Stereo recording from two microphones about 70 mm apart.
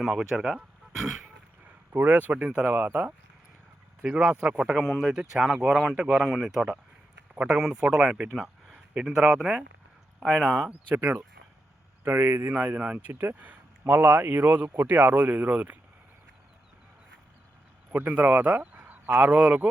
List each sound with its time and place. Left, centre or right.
0.0 s speech: centre
1.2 s a sound: right
2.7 s speech: right
4.0 s speech: centre
7.3 s speech: centre
8.3 s speech: centre
10.8 s speech: right
12.5 s speech: right
17.9 s speech: right